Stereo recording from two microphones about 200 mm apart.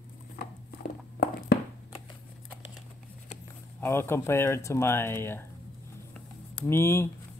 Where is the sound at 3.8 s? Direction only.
10° left (ahead or behind).